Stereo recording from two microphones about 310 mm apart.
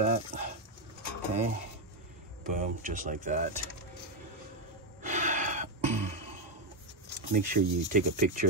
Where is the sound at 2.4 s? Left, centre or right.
Right.